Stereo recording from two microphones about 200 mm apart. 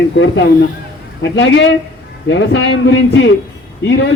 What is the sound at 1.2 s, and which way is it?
A man's voice, 65° left (ahead or behind).